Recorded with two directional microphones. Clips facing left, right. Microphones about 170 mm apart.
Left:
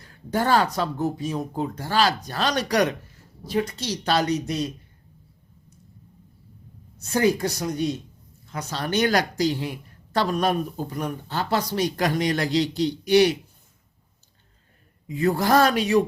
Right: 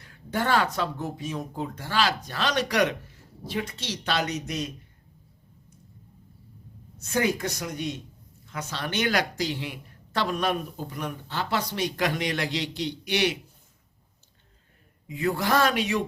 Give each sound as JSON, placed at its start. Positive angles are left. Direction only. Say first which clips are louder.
{"t": 0.0, "sound": "speech", "louder": "left 4 dB", "side_deg": 40}
{"t": 7.0, "sound": "speech", "louder": "left 5 dB", "side_deg": 35}
{"t": 15.0, "sound": "speech", "louder": "left 5 dB", "side_deg": 40}